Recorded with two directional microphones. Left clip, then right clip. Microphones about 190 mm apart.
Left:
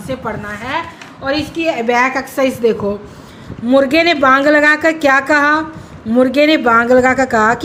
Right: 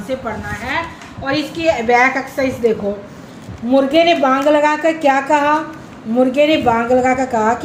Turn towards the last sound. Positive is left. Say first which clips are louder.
# left 3 dB
turn(degrees=50)  # may be behind; listen again after turning